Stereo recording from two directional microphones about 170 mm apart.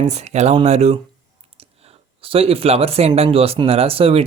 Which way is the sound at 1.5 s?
35° right (ahead or behind).